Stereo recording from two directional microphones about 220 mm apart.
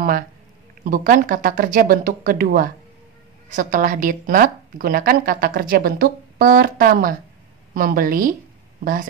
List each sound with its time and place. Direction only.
0.8 s a woman's voice: 40° right (ahead or behind)